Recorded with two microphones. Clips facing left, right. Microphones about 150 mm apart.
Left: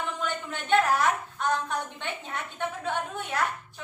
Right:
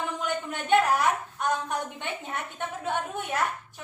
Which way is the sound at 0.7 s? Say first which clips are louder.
Right 1 dB; 15° right (ahead or behind).